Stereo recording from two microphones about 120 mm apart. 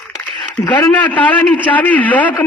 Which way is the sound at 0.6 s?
35° left (ahead or behind).